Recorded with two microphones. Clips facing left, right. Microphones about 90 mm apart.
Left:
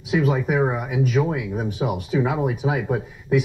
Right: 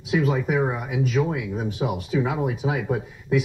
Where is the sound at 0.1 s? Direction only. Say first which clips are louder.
Left 1 dB; 20° left (ahead or behind).